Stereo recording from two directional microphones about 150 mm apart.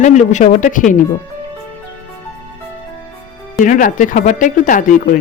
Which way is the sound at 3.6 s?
60° left (ahead or behind).